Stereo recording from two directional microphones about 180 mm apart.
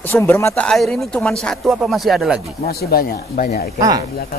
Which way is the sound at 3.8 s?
20° right (ahead or behind).